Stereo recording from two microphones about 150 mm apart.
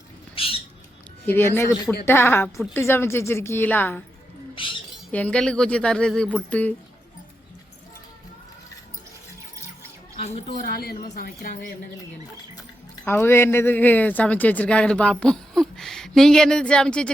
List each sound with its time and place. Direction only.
0.3 s squawk: 40° left (ahead or behind)
1.2 s speech: 15° left (ahead or behind)
4.5 s a sound: 35° left (ahead or behind)
5.1 s speech: 10° left (ahead or behind)
10.2 s speech: 45° left (ahead or behind)
10.7 s a woman's voice: 90° left
13.1 s speech: 15° left (ahead or behind)